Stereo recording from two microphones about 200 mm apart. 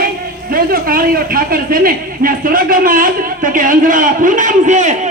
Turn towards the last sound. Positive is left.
turn(degrees=-35)  # may be behind; listen again after turning